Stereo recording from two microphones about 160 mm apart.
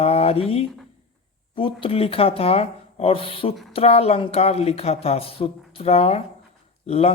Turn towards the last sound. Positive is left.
turn(degrees=40)  # may be behind; listen again after turning